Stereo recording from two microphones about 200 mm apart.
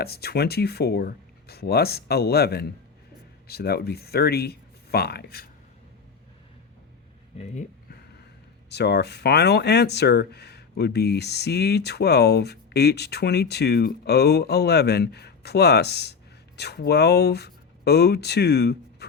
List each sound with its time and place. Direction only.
0.0 s speech: 50° left (ahead or behind)
7.3 s speech: 35° left (ahead or behind)
8.7 s speech: 55° left (ahead or behind)